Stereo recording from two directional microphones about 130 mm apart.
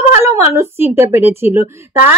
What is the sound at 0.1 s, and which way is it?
A woman's voice, 20° right (ahead or behind).